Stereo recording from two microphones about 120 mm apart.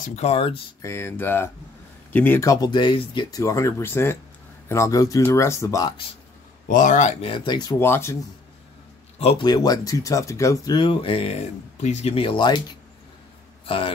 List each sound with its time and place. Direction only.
0.0 s speech: 65° left (ahead or behind)
0.8 s speech: 20° left (ahead or behind)
2.4 s speech: 30° left (ahead or behind)
2.7 s speech: 40° left (ahead or behind)
6.7 s speech: 90° left
7.2 s speech: 50° left (ahead or behind)
7.8 s speech: 20° left (ahead or behind)
9.4 s speech: 35° left (ahead or behind); by 11.3 s 55° left (ahead or behind)
11.8 s speech: 65° left (ahead or behind); by 12.7 s 35° left (ahead or behind)
13.7 s speech: 45° left (ahead or behind)